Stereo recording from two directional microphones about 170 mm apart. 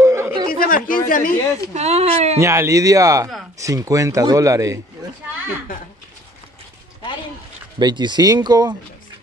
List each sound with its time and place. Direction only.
0.0 s chatter: 15° right (ahead or behind)
0.5 s a sound: 55° left (ahead or behind)
1.7 s speech: 40° right (ahead or behind)
2.3 s speech: 15° right (ahead or behind)
7.8 s speech: 25° right (ahead or behind)